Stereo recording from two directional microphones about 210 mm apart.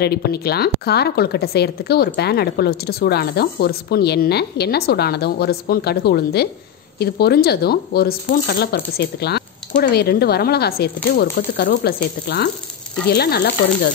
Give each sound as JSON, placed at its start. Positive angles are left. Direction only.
{"t": 0.0, "sound": "a woman's voice", "side_deg": 50}